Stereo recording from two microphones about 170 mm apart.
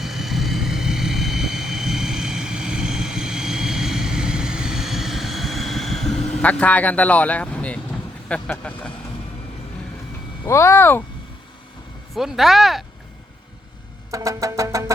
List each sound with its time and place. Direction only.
0.0 s vehicle: centre (ahead or behind)
6.1 s a sound: 40° left (ahead or behind)
6.4 s speech: 10° left (ahead or behind)
10.4 s speech: 15° left (ahead or behind)
12.1 s speech: centre (ahead or behind)
14.1 s music: 20° right (ahead or behind)